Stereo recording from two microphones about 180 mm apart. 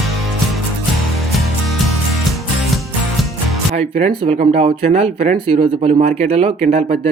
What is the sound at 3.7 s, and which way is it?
Speech, 35° right (ahead or behind).